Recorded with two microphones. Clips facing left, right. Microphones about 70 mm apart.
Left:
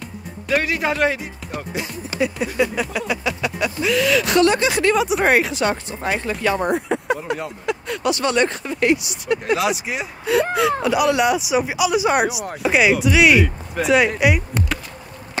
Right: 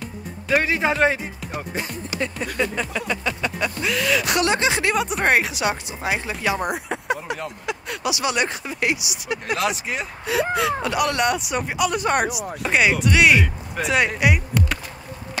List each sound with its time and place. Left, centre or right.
0.5 s speech: right
2.1 s a sound: centre
2.5 s speech: centre
4.5 s speech: right
4.9 s speech: centre